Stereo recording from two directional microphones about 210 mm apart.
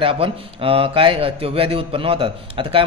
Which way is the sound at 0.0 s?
25° right (ahead or behind).